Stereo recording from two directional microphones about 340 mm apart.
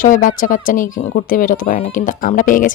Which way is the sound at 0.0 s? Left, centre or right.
Left.